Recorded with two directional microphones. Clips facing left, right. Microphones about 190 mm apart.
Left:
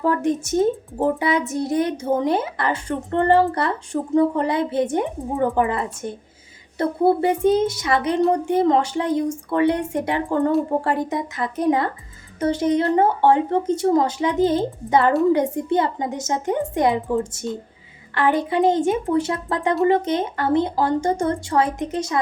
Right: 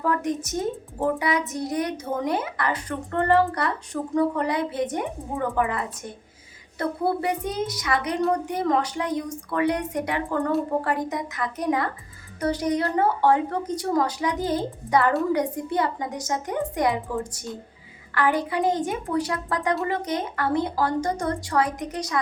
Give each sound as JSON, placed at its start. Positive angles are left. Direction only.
{"t": 0.0, "sound": "speech", "side_deg": 30}